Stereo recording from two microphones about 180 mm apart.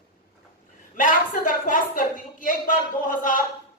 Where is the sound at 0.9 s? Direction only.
50° left (ahead or behind).